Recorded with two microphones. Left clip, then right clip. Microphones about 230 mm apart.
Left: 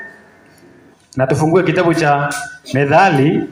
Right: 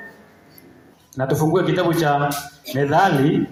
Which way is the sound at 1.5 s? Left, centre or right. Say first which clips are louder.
Left 6 dB; left.